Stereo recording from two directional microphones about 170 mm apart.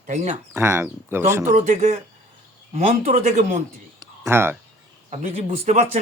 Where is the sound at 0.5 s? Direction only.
15° right (ahead or behind).